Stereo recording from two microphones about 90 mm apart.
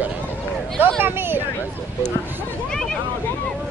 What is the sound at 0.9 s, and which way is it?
Speech, 25° right (ahead or behind).